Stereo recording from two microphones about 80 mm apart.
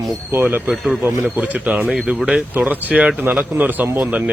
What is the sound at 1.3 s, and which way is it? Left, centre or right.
A man's voice, centre.